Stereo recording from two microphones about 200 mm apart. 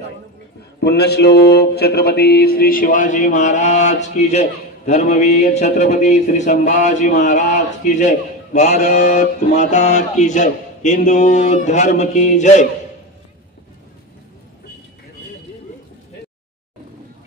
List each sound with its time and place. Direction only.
0.7 s mantra: 55° left (ahead or behind); by 12.6 s 35° left (ahead or behind)